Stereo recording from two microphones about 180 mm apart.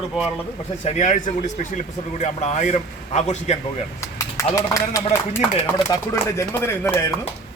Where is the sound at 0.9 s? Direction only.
40° left (ahead or behind).